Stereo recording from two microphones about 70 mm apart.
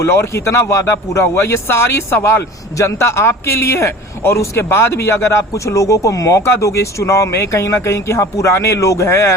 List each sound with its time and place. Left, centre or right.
0.0 s a man's voice: left